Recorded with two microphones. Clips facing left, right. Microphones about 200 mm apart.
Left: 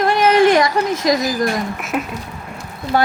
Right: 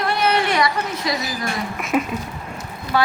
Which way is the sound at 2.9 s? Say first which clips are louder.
Left 3 dB; 45° left (ahead or behind).